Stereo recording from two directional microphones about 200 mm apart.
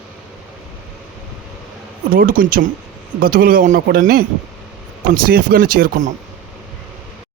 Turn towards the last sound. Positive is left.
turn(degrees=-40)  # may be behind; listen again after turning